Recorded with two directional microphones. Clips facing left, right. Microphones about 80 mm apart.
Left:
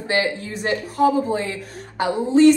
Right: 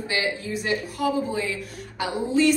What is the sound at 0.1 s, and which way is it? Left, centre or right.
A woman's voice, left.